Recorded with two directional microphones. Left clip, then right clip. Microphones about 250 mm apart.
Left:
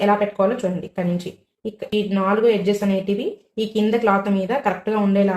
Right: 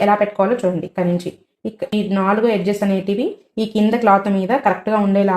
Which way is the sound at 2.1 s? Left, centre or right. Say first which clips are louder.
Right 1 dB; right.